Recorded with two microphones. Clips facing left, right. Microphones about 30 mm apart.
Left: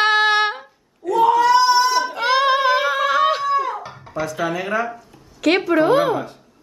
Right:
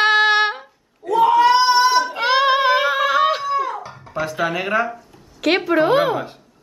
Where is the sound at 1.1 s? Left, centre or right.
Centre.